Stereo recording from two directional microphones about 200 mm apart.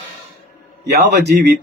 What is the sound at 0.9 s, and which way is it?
Speech, 55° right (ahead or behind).